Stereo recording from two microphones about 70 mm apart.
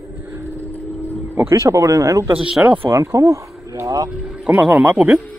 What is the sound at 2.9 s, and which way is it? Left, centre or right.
Speech, right.